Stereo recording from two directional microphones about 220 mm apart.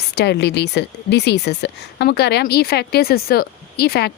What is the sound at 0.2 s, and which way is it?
A woman's voice, 50° left (ahead or behind).